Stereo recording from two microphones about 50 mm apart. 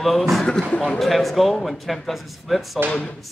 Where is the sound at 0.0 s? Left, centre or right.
Centre.